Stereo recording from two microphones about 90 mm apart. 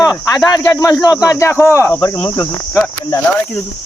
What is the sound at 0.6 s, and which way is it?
Speech, 35° left (ahead or behind).